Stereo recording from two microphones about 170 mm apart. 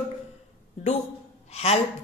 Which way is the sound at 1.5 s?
35° left (ahead or behind).